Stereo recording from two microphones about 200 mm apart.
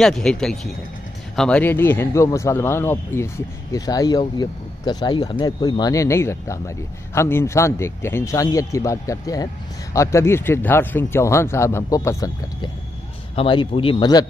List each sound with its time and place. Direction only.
0.0 s speech: centre (ahead or behind)
13.4 s a man's voice: 25° left (ahead or behind)